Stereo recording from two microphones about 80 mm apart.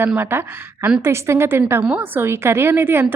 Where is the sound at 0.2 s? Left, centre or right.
Right.